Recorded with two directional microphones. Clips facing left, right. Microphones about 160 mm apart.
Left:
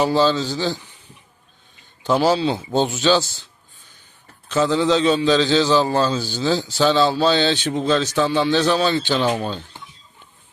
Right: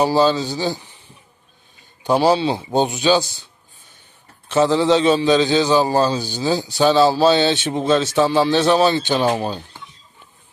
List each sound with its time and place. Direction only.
0.2 s a man's voice: 15° right (ahead or behind)
2.2 s speech: 20° right (ahead or behind)
2.7 s a man's voice: 15° right (ahead or behind)
4.4 s a man's voice: 25° right (ahead or behind)
5.9 s a man's voice: 35° right (ahead or behind)
6.1 s a man's voice: 15° right (ahead or behind)
7.1 s speech: 30° right (ahead or behind)
9.3 s a man's voice: 35° right (ahead or behind)